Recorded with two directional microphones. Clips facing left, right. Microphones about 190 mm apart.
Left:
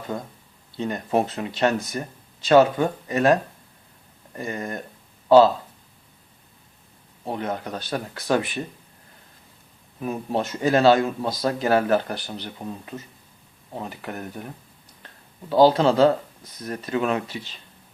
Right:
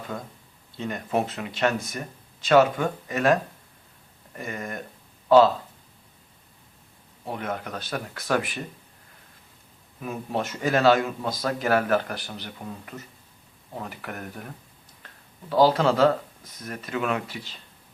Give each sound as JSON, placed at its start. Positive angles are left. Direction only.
{"t": 0.8, "sound": "speech", "side_deg": 30}
{"t": 4.4, "sound": "speech", "side_deg": 30}
{"t": 7.3, "sound": "speech", "side_deg": 30}
{"t": 10.0, "sound": "speech", "side_deg": 30}